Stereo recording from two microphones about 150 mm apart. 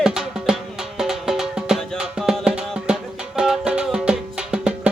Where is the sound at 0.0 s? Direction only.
5° right (ahead or behind).